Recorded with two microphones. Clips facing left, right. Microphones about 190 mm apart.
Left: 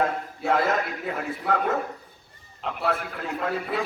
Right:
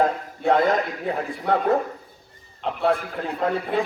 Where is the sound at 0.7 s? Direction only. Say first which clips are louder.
Right 4 dB; 35° right (ahead or behind).